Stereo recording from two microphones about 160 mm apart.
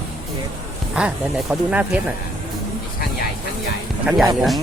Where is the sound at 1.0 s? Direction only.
5° right (ahead or behind).